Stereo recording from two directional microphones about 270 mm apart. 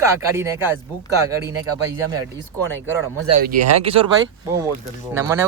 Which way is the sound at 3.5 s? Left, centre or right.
Right.